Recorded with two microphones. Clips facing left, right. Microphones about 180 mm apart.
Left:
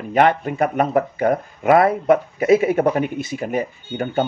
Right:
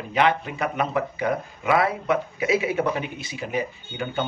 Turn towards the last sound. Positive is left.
turn(degrees=45)  # may be behind; listen again after turning